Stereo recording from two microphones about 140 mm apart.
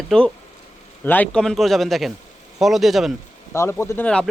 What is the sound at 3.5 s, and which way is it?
Speech, 20° left (ahead or behind).